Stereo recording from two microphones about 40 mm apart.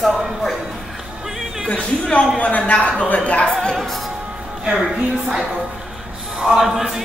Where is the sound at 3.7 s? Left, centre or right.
Centre.